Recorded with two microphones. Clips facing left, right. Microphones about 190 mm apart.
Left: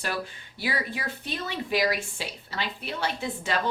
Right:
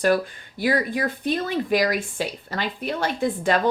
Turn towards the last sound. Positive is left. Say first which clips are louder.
# right 8 dB
turn(degrees=-50)  # may be behind; listen again after turning